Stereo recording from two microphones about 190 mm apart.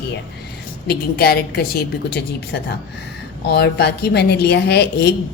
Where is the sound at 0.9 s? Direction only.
55° left (ahead or behind).